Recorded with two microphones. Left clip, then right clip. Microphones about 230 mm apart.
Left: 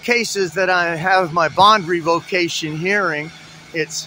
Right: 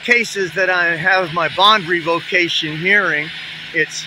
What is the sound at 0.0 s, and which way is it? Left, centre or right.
Speech, centre.